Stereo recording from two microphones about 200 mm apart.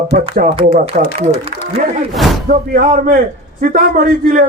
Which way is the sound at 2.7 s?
40° right (ahead or behind).